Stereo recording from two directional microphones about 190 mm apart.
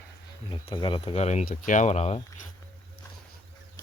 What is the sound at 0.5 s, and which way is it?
Speech, 25° left (ahead or behind).